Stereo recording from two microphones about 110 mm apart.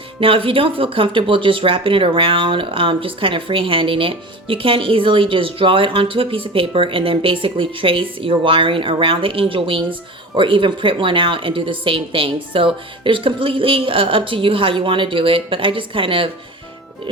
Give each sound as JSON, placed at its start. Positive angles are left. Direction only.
{"t": 0.2, "sound": "speech", "side_deg": -55}